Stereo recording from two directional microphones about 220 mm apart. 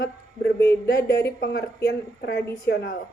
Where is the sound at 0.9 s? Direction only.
50° left (ahead or behind).